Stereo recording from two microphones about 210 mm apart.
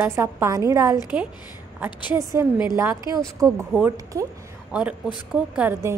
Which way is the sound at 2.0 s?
10° right (ahead or behind).